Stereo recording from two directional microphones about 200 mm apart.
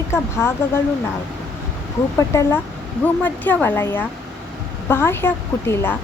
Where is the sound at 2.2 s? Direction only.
15° left (ahead or behind).